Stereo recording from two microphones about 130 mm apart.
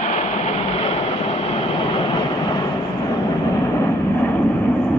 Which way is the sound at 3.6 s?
20° left (ahead or behind).